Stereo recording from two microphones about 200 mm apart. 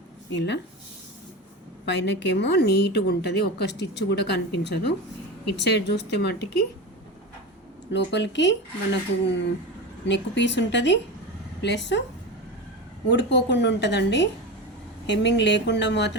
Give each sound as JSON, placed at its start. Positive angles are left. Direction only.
{"t": 0.3, "sound": "speech", "side_deg": 60}
{"t": 1.8, "sound": "speech", "side_deg": 60}
{"t": 7.9, "sound": "speech", "side_deg": 60}
{"t": 13.1, "sound": "speech", "side_deg": 60}